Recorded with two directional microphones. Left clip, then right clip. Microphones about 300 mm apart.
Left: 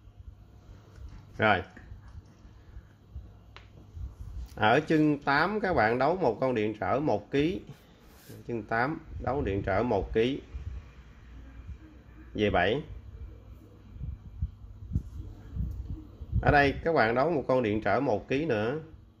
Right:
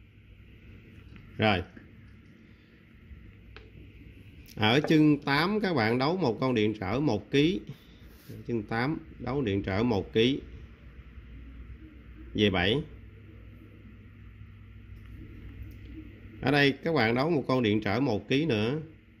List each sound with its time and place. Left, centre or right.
4.6 s speech: right
12.4 s speech: right
16.4 s speech: right